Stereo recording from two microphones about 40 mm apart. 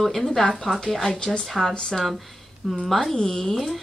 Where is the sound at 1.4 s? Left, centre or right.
Centre.